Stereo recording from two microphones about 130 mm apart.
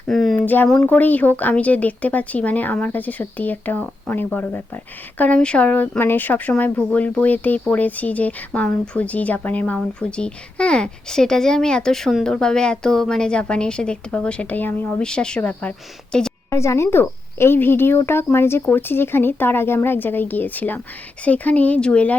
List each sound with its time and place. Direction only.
0.1 s a woman's voice: 5° left (ahead or behind)
16.5 s speech: 20° left (ahead or behind)